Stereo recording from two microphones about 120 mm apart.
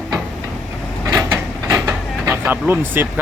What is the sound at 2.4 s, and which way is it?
Speech, 15° right (ahead or behind).